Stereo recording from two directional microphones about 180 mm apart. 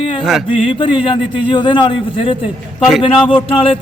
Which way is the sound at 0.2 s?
Centre (ahead or behind).